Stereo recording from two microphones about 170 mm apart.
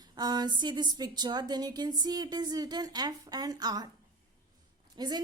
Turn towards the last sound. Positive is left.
turn(degrees=-25)  # may be behind; listen again after turning